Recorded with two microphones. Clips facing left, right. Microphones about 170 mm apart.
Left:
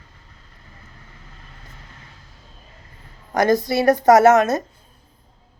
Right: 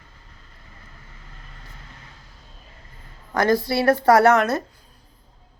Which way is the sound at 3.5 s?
20° left (ahead or behind).